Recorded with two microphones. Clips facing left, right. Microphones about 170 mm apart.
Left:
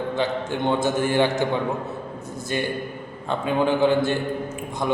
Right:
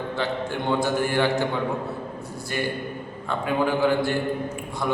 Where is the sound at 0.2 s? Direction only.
20° left (ahead or behind).